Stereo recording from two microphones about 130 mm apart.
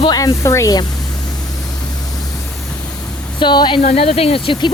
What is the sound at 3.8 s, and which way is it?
Speech, 50° left (ahead or behind).